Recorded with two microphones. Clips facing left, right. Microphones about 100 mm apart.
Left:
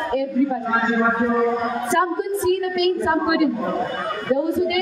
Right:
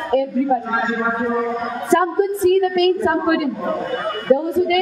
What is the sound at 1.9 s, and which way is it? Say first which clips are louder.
A woman's voice: right 6 dB; 20° left (ahead or behind).